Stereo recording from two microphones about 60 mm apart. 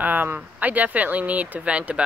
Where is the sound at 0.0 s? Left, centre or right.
Right.